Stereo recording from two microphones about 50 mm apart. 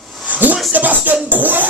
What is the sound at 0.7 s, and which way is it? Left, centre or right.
Speech, right.